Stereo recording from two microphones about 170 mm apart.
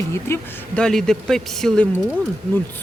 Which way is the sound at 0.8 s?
5° left (ahead or behind).